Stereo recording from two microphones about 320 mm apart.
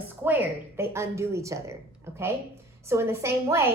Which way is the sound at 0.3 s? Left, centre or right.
Centre.